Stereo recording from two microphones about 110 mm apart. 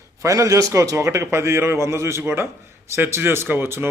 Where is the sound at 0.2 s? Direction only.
30° right (ahead or behind).